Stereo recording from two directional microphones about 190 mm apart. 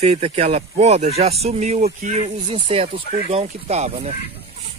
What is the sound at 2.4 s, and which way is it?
Speech, 25° right (ahead or behind).